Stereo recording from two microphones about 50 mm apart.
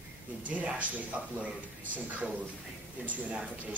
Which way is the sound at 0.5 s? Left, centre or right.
Right.